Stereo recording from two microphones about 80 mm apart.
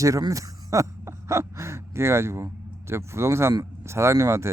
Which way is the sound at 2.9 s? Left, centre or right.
Right.